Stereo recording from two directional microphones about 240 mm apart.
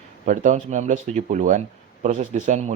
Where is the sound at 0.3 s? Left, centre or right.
Right.